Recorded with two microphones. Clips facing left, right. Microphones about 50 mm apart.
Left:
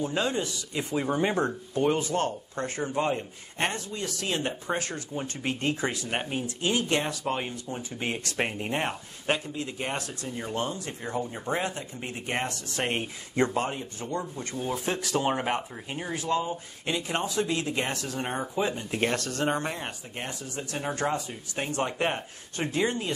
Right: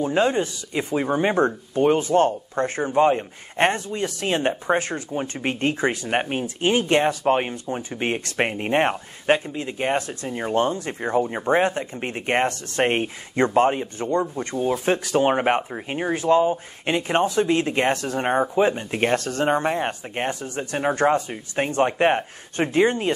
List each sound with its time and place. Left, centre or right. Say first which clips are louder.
0.0 s speech: right 8 dB; right